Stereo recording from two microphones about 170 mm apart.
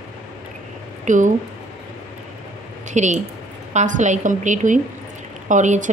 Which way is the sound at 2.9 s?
45° right (ahead or behind).